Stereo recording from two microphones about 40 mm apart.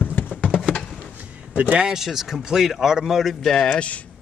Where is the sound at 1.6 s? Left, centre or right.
Right.